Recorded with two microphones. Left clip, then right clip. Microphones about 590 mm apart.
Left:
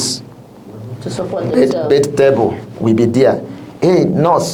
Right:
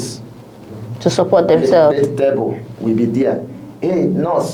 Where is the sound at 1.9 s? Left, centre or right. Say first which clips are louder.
Left 3 dB; left.